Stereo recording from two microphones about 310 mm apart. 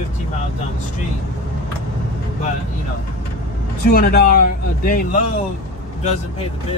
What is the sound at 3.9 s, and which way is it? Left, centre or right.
Speech, left.